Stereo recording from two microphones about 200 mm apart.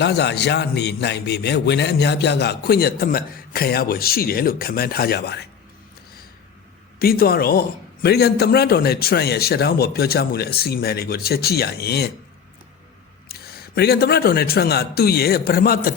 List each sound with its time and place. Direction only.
0.0 s a man's voice: 55° left (ahead or behind)
7.0 s a man's voice: 50° left (ahead or behind)
13.2 s a man's voice: 50° left (ahead or behind)